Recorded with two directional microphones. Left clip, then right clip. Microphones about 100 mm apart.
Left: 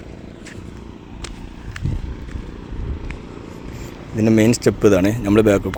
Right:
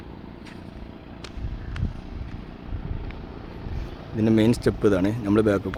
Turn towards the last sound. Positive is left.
turn(degrees=20)  # may be behind; listen again after turning